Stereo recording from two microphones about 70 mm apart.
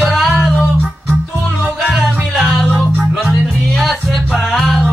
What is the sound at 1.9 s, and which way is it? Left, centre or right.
Music, centre.